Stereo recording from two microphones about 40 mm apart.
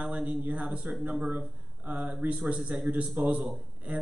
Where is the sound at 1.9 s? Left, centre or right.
Right.